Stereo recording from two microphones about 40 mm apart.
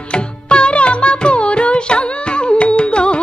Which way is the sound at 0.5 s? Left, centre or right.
Left.